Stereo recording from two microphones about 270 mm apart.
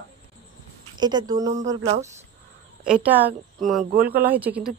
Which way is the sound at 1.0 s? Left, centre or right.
Centre.